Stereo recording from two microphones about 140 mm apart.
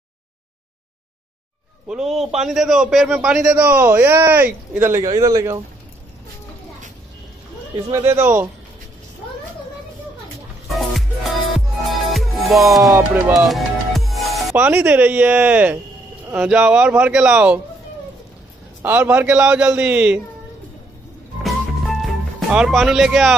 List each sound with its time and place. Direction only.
1.9 s a man's voice: centre (ahead or behind)
5.0 s speech: 30° right (ahead or behind)
7.9 s a man's voice: 20° right (ahead or behind)
10.7 s music: centre (ahead or behind)
13.1 s speech: 20° right (ahead or behind)
13.5 s music: centre (ahead or behind)
14.6 s a man's voice: 10° right (ahead or behind)
18.8 s a man's voice: 10° right (ahead or behind)
21.4 s music: centre (ahead or behind)